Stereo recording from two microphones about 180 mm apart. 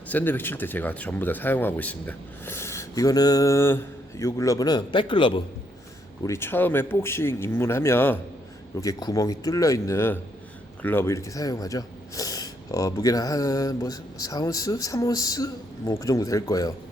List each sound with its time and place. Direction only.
0.1 s speech: 10° left (ahead or behind); by 5.4 s 25° left (ahead or behind)
6.2 s speech: 15° left (ahead or behind)